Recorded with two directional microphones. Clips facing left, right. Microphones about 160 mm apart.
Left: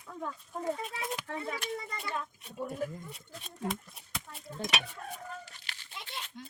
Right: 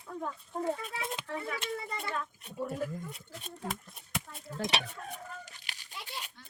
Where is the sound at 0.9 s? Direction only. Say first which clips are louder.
Even; 25° right (ahead or behind).